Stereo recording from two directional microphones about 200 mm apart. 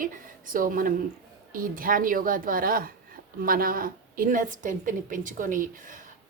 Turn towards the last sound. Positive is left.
turn(degrees=-40)  # may be behind; listen again after turning